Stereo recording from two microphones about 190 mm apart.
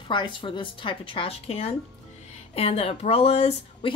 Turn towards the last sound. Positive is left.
turn(degrees=30)  # may be behind; listen again after turning